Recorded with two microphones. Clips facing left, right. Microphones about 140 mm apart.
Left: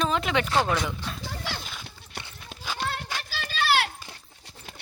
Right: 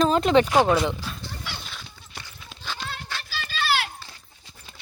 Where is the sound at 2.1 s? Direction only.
65° left (ahead or behind).